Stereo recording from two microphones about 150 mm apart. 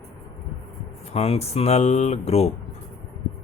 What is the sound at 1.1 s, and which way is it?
Speech, 45° left (ahead or behind).